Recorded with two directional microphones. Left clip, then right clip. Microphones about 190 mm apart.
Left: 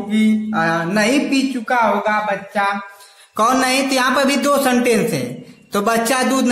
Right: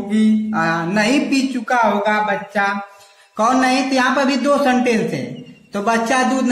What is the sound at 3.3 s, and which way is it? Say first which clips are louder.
Speech: even; 35° left (ahead or behind).